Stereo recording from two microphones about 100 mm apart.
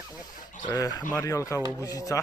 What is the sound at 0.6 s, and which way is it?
Speech, 40° left (ahead or behind).